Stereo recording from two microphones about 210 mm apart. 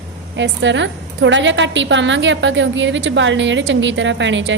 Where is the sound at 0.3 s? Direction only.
60° right (ahead or behind).